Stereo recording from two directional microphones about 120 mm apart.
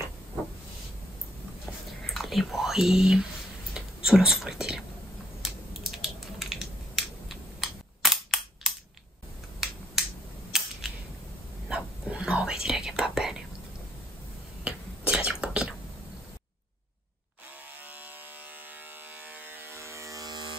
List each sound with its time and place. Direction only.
2.0 s speech: centre (ahead or behind)
5.4 s a sound: 5° right (ahead or behind)
10.0 s finger snapping: 5° right (ahead or behind)
10.5 s cap gun: 5° right (ahead or behind)
11.7 s whispering: 10° right (ahead or behind)
14.6 s whispering: 10° right (ahead or behind)
19.1 s electric shaver: 15° right (ahead or behind); by 20.5 s 35° right (ahead or behind)